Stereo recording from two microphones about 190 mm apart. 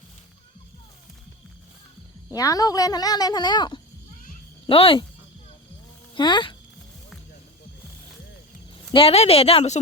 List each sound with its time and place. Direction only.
2.3 s speech: 20° left (ahead or behind)
6.1 s speech: 25° left (ahead or behind)
8.9 s a woman's voice: 30° left (ahead or behind)